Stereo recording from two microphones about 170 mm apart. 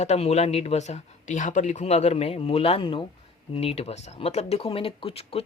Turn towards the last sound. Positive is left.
turn(degrees=35)  # may be behind; listen again after turning